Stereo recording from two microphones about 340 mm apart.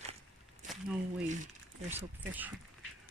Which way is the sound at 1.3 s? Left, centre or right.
Right.